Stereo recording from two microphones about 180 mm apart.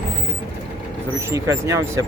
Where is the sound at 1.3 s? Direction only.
15° right (ahead or behind).